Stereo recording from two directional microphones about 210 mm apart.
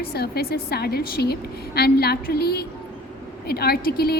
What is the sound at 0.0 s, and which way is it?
A woman's voice, 50° left (ahead or behind).